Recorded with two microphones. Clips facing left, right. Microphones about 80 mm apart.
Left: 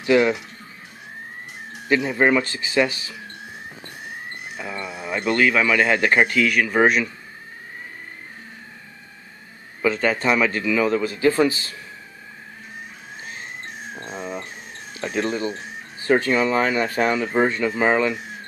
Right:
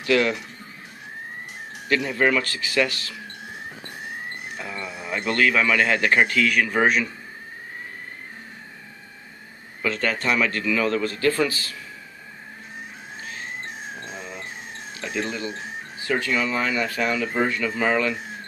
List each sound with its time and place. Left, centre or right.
0.0 s speech: centre
2.0 s speech: centre
4.6 s speech: centre
9.8 s speech: centre
11.2 s speech: left
14.0 s a sound: left
15.0 s speech: left